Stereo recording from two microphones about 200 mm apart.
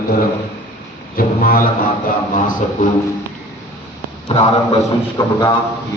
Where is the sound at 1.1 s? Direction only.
45° left (ahead or behind).